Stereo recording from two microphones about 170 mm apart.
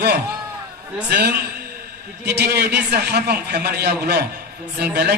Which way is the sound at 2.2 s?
70° right (ahead or behind).